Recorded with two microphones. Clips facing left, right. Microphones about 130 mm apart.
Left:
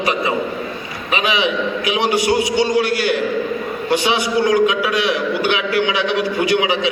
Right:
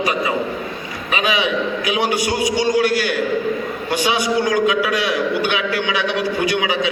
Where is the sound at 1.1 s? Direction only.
20° left (ahead or behind).